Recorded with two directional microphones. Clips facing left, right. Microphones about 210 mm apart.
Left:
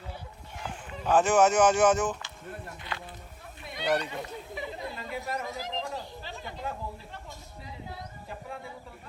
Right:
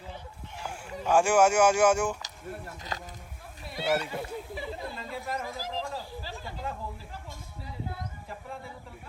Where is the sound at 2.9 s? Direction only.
40° right (ahead or behind).